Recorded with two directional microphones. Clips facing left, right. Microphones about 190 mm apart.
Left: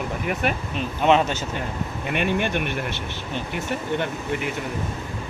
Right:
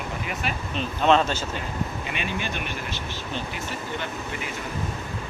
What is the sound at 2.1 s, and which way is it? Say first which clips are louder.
Speech: left 7 dB; 60° left (ahead or behind).